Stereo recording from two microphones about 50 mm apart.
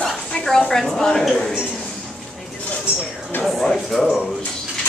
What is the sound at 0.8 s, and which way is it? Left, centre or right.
Speech, centre.